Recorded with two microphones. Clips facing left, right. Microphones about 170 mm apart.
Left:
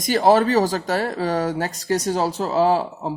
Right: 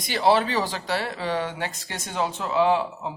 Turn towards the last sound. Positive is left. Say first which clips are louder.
# left 3 dB
turn(degrees=40)  # may be behind; listen again after turning